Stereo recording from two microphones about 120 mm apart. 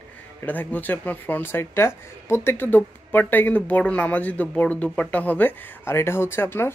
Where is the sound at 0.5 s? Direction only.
15° left (ahead or behind).